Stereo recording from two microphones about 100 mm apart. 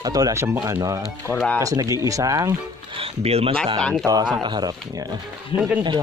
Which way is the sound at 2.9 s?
80° right.